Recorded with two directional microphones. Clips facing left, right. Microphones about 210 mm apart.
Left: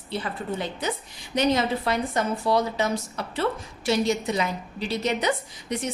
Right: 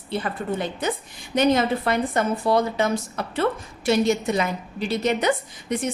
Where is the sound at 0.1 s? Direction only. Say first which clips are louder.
Right 3 dB; 50° right (ahead or behind).